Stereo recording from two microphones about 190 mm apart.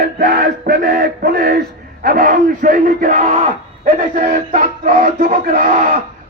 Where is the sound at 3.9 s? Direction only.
40° right (ahead or behind).